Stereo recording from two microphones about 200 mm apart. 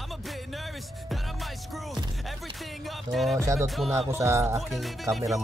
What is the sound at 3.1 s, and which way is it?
Music, centre (ahead or behind).